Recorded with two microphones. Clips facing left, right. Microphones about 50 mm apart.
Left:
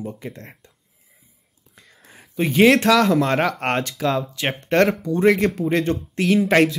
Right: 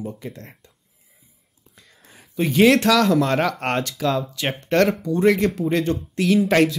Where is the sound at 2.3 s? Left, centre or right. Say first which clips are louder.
Left 1 dB; left.